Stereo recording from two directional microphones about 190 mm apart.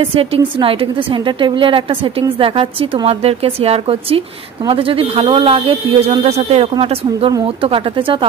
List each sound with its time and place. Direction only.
0.0 s speech: 30° right (ahead or behind)